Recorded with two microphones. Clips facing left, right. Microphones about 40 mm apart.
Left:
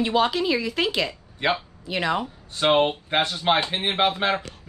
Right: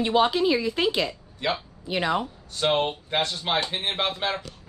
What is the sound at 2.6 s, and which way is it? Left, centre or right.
Speech, left.